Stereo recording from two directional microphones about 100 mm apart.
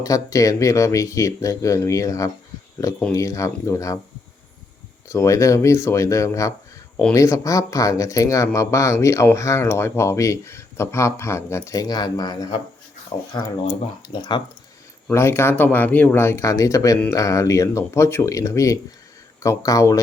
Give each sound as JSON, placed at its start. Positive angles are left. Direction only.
{"t": 0.0, "sound": "speech", "side_deg": 35}
{"t": 5.0, "sound": "speech", "side_deg": 30}
{"t": 15.1, "sound": "speech", "side_deg": 25}